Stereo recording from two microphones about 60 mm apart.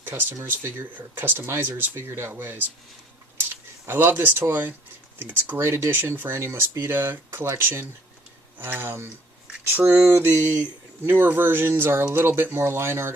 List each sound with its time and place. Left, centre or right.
0.0 s speech: right
7.4 s speech: right
8.5 s speech: right